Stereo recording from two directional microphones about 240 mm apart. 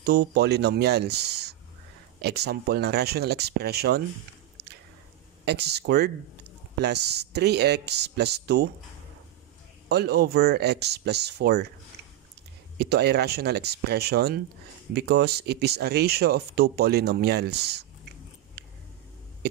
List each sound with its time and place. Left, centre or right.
0.0 s speech: right
4.6 s squish: right
5.4 s speech: right
9.8 s speech: right
12.7 s speech: right